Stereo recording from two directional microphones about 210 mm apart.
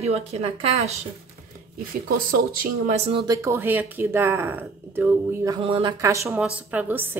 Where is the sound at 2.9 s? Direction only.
30° right (ahead or behind).